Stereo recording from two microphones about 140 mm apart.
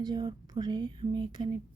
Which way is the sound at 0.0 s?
30° right (ahead or behind).